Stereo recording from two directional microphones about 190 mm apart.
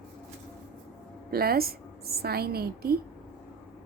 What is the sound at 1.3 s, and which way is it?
A woman's voice, 55° right (ahead or behind).